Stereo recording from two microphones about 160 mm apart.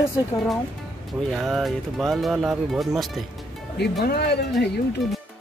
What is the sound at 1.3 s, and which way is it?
Speech, centre (ahead or behind).